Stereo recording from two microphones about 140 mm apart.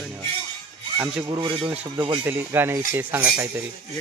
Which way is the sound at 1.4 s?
35° right (ahead or behind).